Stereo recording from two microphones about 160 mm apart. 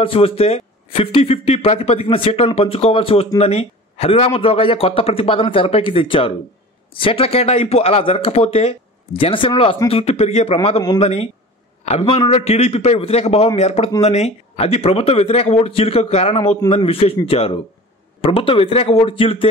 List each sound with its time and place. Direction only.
0.0 s speech: 35° left (ahead or behind)